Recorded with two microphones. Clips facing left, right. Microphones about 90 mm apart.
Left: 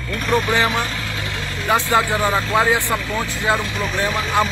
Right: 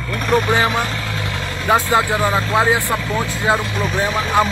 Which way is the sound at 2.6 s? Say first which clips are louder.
Right 1 dB; 20° right (ahead or behind).